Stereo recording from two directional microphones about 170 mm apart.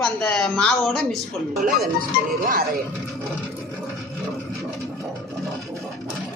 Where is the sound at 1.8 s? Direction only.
55° right (ahead or behind).